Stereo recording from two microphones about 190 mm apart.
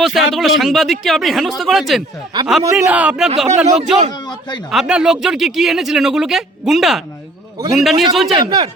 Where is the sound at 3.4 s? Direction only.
40° right (ahead or behind).